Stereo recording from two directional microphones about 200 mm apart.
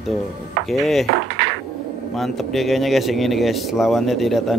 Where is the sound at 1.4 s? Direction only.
60° right (ahead or behind).